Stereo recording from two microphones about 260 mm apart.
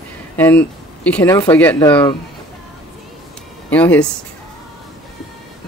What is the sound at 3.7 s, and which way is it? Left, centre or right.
Speech, centre.